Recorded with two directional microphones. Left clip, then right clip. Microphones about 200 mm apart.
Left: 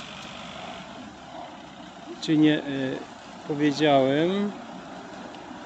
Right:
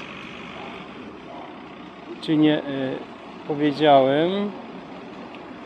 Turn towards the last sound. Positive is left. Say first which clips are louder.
# right 4 dB
turn(degrees=20)  # may be behind; listen again after turning